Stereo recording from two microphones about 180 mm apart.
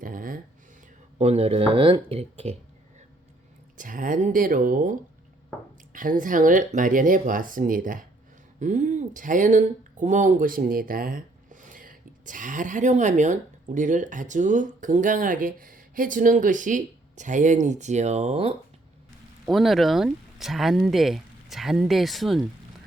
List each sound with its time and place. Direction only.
0.0 s a sound: 50° right (ahead or behind)
1.2 s speech: 35° right (ahead or behind)
3.8 s speech: 50° right (ahead or behind)
19.5 s speech: centre (ahead or behind)